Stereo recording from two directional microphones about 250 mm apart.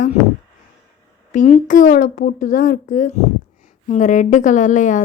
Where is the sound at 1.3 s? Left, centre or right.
Left.